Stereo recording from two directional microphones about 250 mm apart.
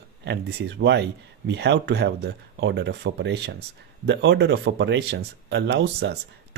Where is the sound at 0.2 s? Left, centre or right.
Right.